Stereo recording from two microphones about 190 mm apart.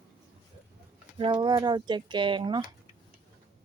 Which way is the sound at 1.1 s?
25° right (ahead or behind).